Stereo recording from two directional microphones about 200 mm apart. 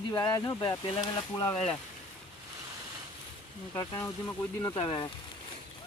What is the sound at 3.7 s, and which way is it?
Speech, 20° left (ahead or behind).